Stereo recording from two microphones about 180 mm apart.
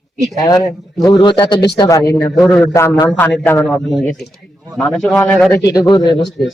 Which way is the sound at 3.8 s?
75° left (ahead or behind).